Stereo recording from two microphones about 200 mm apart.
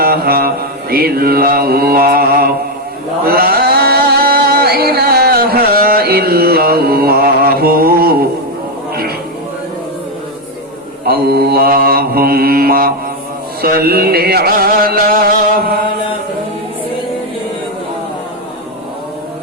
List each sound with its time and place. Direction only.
0.0 s mantra: 50° right (ahead or behind)
3.2 s a sound: 50° right (ahead or behind)
11.0 s mantra: 50° right (ahead or behind)